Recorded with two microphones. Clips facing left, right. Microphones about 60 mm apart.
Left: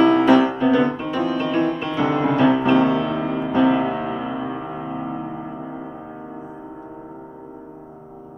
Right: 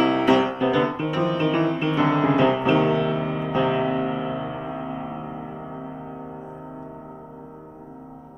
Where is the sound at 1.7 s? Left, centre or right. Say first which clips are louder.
Even; right.